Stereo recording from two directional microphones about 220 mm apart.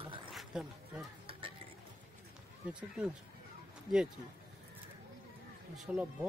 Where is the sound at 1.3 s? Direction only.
25° right (ahead or behind).